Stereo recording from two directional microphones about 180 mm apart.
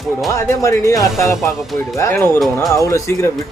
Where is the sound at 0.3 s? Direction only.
15° left (ahead or behind).